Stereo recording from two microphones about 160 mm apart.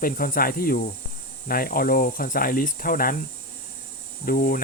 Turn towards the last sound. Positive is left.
turn(degrees=65)  # may be behind; listen again after turning